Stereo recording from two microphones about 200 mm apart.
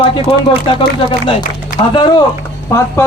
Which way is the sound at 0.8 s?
25° left (ahead or behind).